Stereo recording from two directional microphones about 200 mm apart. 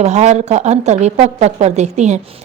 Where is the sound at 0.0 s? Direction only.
35° right (ahead or behind).